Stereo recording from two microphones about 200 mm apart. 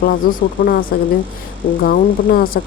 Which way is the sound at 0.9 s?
50° left (ahead or behind).